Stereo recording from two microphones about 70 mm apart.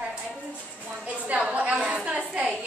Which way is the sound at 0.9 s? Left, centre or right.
Centre.